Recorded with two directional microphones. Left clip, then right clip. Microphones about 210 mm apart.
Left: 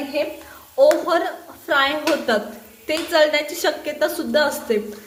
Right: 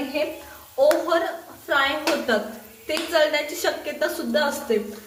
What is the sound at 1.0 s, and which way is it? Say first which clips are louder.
A woman's voice: left 2 dB; 45° left (ahead or behind).